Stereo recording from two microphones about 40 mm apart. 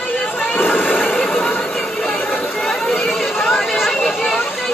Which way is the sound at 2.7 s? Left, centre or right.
Centre.